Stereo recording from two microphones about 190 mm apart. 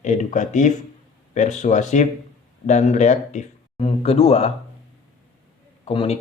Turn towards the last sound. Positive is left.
turn(degrees=30)  # may be behind; listen again after turning